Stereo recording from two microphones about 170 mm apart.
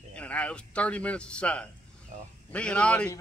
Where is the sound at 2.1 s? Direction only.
40° right (ahead or behind).